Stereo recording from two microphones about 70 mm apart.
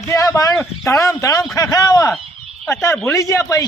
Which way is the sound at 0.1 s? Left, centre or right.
Left.